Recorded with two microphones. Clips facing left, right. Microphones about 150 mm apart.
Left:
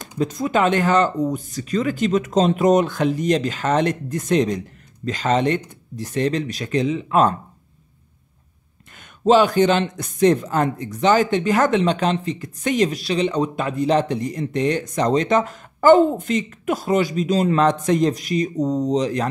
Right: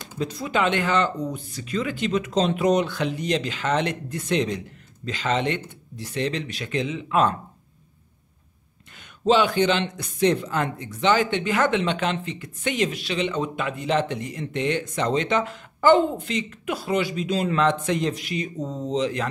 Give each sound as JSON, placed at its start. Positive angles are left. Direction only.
{"t": 0.2, "sound": "speech", "side_deg": 45}
{"t": 9.2, "sound": "speech", "side_deg": 45}